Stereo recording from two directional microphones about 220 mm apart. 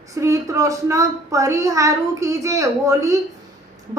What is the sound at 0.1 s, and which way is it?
A woman's voice, 15° right (ahead or behind).